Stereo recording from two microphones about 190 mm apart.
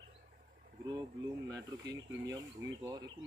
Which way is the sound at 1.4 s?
20° right (ahead or behind).